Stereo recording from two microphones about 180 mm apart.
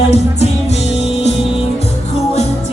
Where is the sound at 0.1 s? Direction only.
35° left (ahead or behind).